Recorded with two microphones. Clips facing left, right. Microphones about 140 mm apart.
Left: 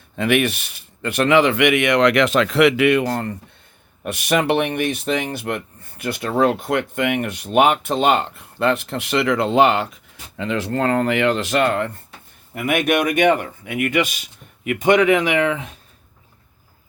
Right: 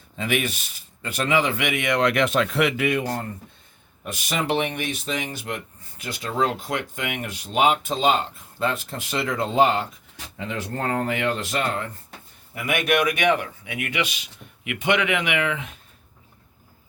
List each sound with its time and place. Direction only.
0.2 s a man's voice: 65° left (ahead or behind)
4.0 s speech: 65° left (ahead or behind)
12.5 s speech: 50° left (ahead or behind)